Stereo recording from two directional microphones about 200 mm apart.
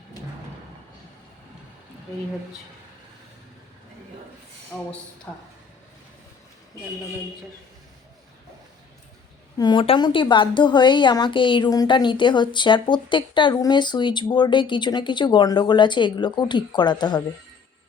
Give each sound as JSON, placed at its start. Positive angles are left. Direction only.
{"t": 4.7, "sound": "speech", "side_deg": 5}
{"t": 9.6, "sound": "a woman's voice", "side_deg": 20}